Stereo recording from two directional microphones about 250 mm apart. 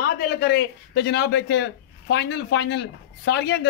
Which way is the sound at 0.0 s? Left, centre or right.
Left.